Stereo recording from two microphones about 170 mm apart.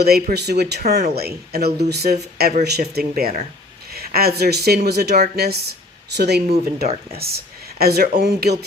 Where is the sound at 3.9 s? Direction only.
65° right (ahead or behind).